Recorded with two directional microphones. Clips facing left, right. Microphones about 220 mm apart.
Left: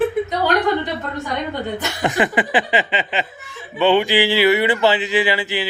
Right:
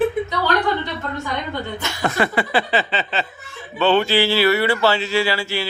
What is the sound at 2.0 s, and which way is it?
Speech, 15° left (ahead or behind).